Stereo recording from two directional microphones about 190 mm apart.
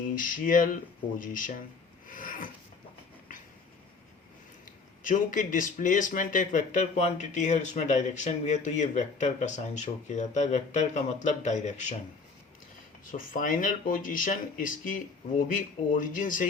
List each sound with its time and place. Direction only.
0.2 s speech: 45° left (ahead or behind)
2.0 s rub: 45° left (ahead or behind)
5.0 s speech: 45° left (ahead or behind)
13.1 s speech: 45° left (ahead or behind)